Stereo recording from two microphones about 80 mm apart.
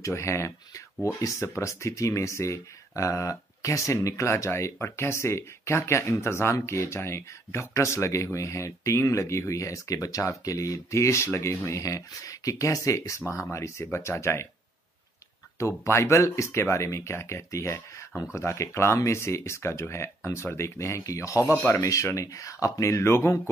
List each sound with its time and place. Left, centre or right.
0.0 s speech: left
15.6 s speech: left